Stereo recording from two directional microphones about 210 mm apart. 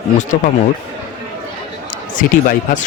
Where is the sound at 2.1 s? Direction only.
40° left (ahead or behind).